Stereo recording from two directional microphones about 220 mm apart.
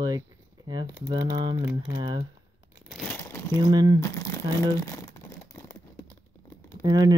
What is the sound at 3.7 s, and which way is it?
Speech, 20° right (ahead or behind).